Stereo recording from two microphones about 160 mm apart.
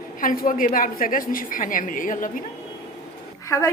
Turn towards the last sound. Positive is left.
turn(degrees=20)  # may be behind; listen again after turning